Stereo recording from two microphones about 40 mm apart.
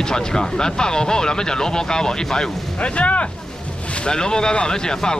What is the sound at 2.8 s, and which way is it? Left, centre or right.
Speech, left.